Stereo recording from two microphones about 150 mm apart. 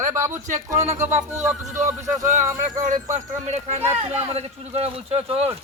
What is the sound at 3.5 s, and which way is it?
A man's voice, 45° right (ahead or behind).